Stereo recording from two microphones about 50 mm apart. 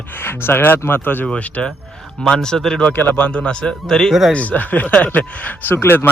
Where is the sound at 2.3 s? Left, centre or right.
Centre.